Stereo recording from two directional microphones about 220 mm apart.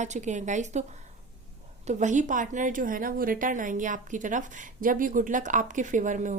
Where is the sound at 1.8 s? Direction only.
35° right (ahead or behind).